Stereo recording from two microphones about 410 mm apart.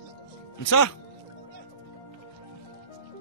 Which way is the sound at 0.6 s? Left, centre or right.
Left.